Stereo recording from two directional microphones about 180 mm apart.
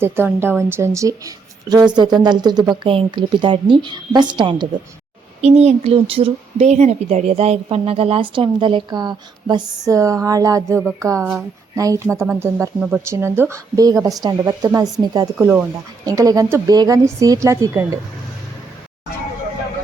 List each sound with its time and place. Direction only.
0.0 s a woman's voice: 10° right (ahead or behind)
5.4 s a woman's voice: 35° right (ahead or behind); by 15.4 s 20° right (ahead or behind)
15.4 s a woman's voice: 10° right (ahead or behind)